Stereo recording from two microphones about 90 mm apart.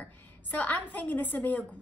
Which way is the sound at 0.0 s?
20° left (ahead or behind).